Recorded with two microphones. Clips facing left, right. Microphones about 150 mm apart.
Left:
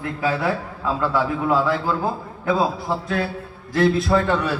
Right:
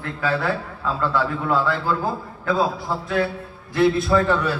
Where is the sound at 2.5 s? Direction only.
Centre (ahead or behind).